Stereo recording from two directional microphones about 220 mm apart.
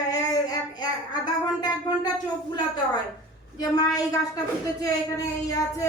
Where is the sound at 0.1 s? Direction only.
15° left (ahead or behind).